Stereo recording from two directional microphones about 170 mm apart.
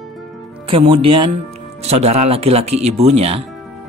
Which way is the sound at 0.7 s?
30° right (ahead or behind).